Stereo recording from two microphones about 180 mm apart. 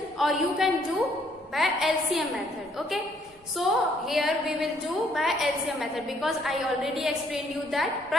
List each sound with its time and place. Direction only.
0.2 s a woman's voice: centre (ahead or behind)
3.6 s a woman's voice: centre (ahead or behind)